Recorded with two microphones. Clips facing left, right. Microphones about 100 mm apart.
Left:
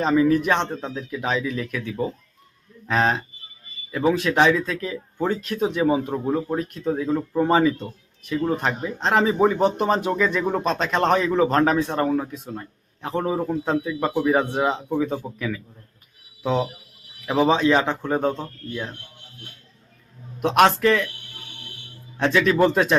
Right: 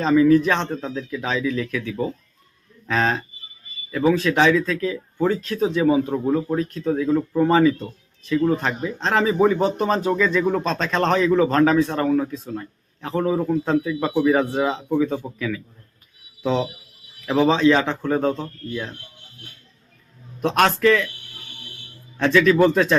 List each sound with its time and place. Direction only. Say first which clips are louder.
0.0 s speech: right 3 dB; 25° left (ahead or behind)
14.0 s speech: right 2 dB; centre (ahead or behind)
14.5 s speech: right 1 dB; 15° left (ahead or behind)
20.4 s speech: left 1 dB; 20° left (ahead or behind)
22.2 s speech: right 3 dB; 20° left (ahead or behind)